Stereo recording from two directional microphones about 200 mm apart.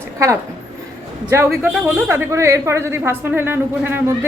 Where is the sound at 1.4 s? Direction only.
Centre (ahead or behind).